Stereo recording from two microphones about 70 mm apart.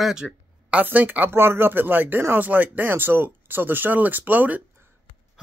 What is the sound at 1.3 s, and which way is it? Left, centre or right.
Speech, right.